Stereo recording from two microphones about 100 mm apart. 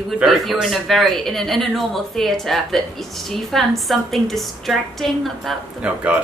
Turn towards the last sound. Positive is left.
turn(degrees=0)  # may be behind; listen again after turning